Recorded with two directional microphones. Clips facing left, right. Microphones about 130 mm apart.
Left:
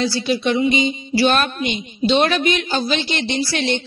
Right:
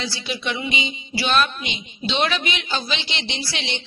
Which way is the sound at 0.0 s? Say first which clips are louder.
Left 9 dB; 40° left (ahead or behind).